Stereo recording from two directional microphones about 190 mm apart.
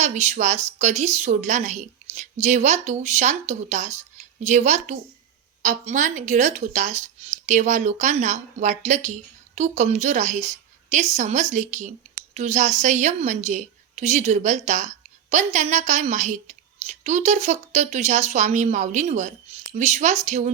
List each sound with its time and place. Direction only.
0.0 s a woman's voice: 35° right (ahead or behind)